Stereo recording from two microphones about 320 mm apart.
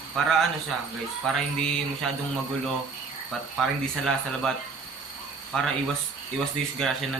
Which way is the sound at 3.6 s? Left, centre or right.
Centre.